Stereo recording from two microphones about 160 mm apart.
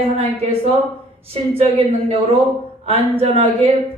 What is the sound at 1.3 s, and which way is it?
Speech, 40° right (ahead or behind).